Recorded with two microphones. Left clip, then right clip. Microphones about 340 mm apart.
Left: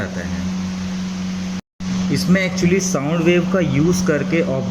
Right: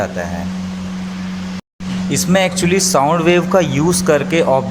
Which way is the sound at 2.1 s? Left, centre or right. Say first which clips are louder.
Right 5 dB; centre.